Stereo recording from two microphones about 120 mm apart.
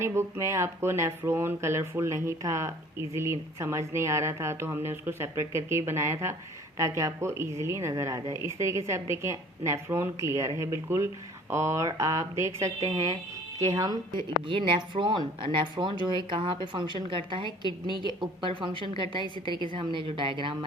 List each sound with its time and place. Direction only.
0.0 s speech: 20° right (ahead or behind)
14.4 s speech: 45° right (ahead or behind)